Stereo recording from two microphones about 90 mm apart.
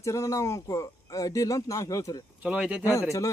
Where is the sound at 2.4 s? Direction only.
10° right (ahead or behind).